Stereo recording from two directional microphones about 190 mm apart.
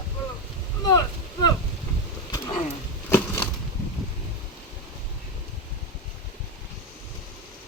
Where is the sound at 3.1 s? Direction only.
10° left (ahead or behind).